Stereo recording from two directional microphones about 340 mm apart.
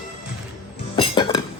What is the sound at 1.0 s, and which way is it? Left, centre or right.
Chink, centre.